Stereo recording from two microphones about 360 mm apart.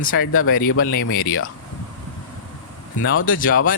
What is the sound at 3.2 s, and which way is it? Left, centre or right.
Speech, left.